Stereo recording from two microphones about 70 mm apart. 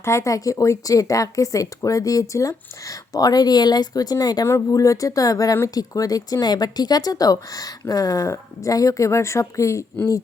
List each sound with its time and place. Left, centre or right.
0.0 s speech: left
4.7 s speech: left